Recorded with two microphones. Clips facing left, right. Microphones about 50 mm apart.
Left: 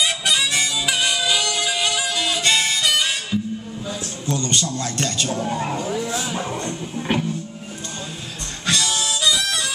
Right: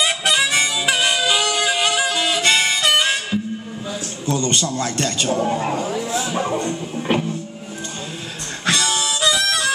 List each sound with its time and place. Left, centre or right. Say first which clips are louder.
0.0 s music: right 3 dB; right
4.3 s a man's voice: right 3 dB; right
6.3 s music: right 5 dB; centre
8.6 s harmonica: right 2 dB; right